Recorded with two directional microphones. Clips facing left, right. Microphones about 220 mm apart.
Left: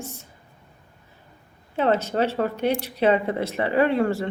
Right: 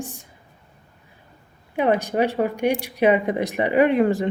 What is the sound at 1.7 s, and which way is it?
Speech, 15° right (ahead or behind).